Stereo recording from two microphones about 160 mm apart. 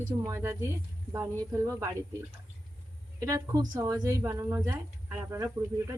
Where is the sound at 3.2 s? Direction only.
20° right (ahead or behind).